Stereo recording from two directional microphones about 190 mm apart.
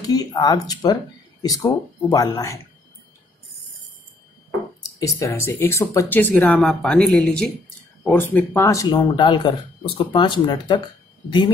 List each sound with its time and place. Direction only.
0.0 s speech: 20° left (ahead or behind)
5.0 s speech: 15° left (ahead or behind)